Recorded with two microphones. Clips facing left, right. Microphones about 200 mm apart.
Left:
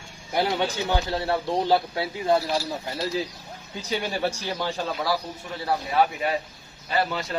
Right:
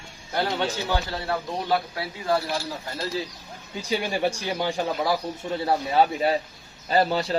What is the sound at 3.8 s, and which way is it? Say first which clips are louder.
Speech: right 2 dB; 15° right (ahead or behind).